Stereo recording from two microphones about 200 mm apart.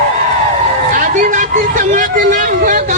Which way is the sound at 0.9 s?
40° right (ahead or behind).